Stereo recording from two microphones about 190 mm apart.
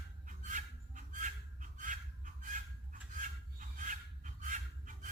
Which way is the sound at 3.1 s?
45° right (ahead or behind).